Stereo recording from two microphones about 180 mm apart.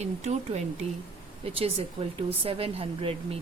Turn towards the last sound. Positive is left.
turn(degrees=-30)  # may be behind; listen again after turning